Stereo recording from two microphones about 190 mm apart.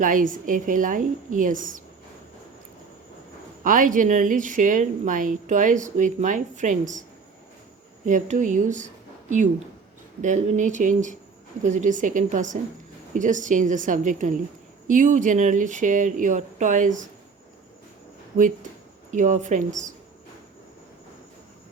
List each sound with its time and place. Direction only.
0.0 s a woman's voice: 45° right (ahead or behind)
3.6 s a woman's voice: 45° right (ahead or behind)
8.0 s speech: 40° right (ahead or behind)
10.2 s a woman's voice: 40° right (ahead or behind)
19.1 s speech: 40° right (ahead or behind)